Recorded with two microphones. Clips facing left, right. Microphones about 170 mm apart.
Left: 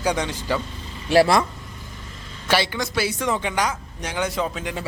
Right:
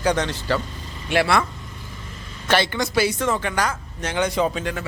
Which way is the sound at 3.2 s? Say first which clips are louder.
Right 1 dB; 15° left (ahead or behind).